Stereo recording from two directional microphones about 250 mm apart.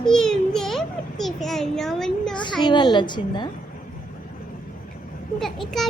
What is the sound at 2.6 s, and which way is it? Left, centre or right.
Speech, centre.